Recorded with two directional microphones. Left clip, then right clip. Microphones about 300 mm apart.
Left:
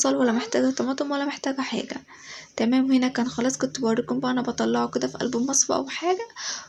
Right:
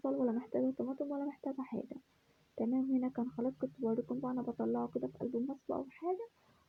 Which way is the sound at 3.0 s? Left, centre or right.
Centre.